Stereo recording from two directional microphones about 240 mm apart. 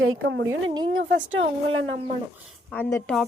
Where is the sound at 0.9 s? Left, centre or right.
Right.